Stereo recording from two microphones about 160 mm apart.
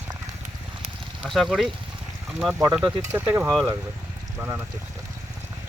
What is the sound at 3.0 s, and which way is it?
Speech, 15° right (ahead or behind).